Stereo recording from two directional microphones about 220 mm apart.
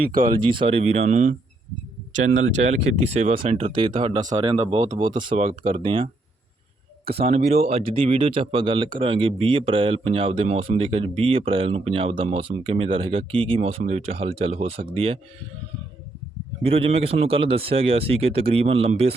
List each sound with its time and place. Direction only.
0.1 s speech: 40° right (ahead or behind)
0.4 s speech: 25° right (ahead or behind)
2.6 s speech: 30° right (ahead or behind)
7.2 s speech: 30° right (ahead or behind)
16.6 s speech: 25° right (ahead or behind)